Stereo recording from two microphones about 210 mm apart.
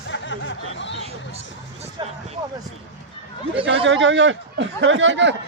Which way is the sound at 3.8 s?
60° right (ahead or behind).